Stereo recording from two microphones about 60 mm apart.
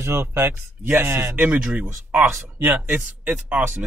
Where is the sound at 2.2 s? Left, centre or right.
Right.